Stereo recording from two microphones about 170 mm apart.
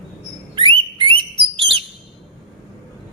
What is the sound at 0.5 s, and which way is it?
Bird, 30° right (ahead or behind).